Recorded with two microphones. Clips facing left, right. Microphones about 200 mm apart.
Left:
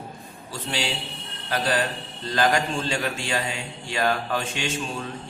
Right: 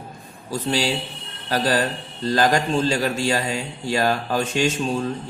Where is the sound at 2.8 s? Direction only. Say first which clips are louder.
Right 7 dB; 40° right (ahead or behind).